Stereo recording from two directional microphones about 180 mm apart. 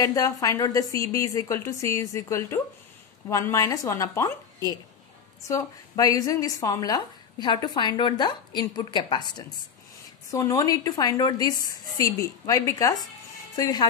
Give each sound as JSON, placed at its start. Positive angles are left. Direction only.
{"t": 0.0, "sound": "a woman's voice", "side_deg": 20}